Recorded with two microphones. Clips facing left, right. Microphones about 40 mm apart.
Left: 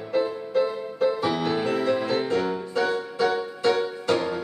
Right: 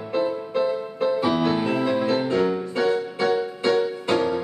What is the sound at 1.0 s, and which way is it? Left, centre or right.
Music, centre.